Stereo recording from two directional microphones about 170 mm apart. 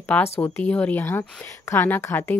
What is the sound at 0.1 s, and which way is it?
Speech, 10° left (ahead or behind).